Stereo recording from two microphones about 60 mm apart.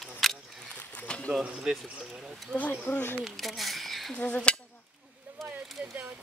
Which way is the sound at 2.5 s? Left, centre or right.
Left.